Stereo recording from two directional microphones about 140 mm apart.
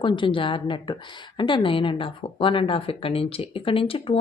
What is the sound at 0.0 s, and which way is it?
A woman's voice, 35° left (ahead or behind).